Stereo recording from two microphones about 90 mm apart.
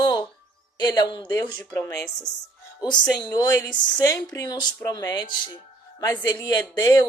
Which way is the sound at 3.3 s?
45° left (ahead or behind).